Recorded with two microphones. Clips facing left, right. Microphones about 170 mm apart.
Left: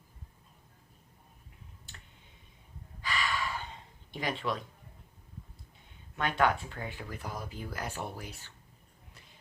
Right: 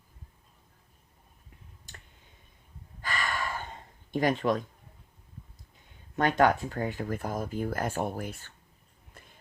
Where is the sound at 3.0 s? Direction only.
50° right (ahead or behind).